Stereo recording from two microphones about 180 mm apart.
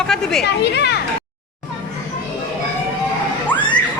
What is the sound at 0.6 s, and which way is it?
Speech, 70° left (ahead or behind).